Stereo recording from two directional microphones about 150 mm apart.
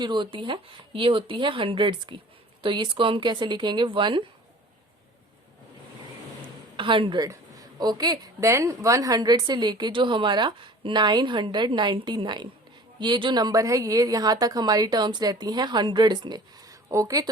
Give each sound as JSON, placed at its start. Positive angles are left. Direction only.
{"t": 0.0, "sound": "speech", "side_deg": -30}
{"t": 6.7, "sound": "a woman's voice", "side_deg": -35}